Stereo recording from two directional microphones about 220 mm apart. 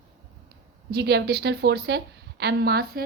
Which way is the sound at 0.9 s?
50° right (ahead or behind).